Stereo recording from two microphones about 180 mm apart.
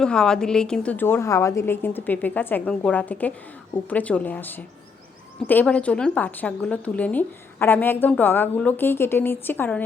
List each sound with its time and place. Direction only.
0.0 s a woman's voice: 5° left (ahead or behind)